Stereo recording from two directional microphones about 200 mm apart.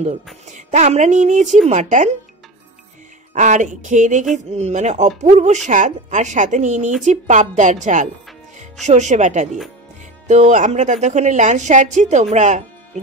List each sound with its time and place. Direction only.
0.0 s speech: 35° right (ahead or behind)
3.3 s speech: 40° right (ahead or behind)